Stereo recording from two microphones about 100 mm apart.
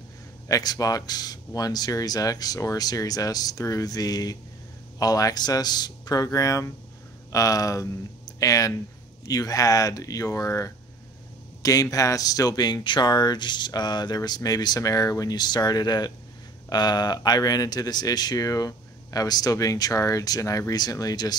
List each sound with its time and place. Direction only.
0.5 s speech: 40° left (ahead or behind)